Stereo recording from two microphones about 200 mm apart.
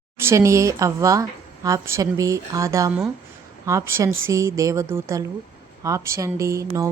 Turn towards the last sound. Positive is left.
turn(degrees=-15)  # may be behind; listen again after turning